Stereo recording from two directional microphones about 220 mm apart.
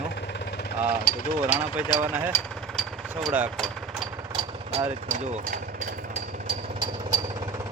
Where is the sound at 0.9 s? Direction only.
40° left (ahead or behind).